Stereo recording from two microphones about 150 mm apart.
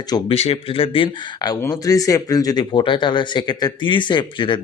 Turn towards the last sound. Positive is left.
turn(degrees=30)  # may be behind; listen again after turning